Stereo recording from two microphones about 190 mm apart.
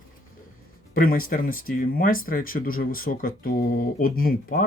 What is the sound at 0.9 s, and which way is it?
Speech, 50° left (ahead or behind).